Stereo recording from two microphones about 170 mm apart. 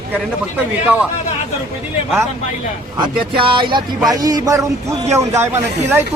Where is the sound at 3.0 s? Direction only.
30° right (ahead or behind).